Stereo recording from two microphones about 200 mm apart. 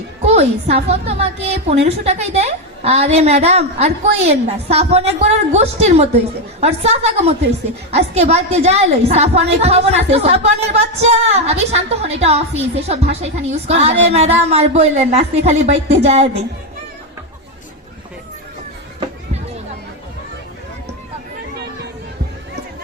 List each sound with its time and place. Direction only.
0.2 s a woman's voice: 35° right (ahead or behind)